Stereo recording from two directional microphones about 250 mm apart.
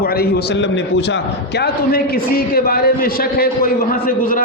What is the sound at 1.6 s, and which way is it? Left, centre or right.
A man's voice, left.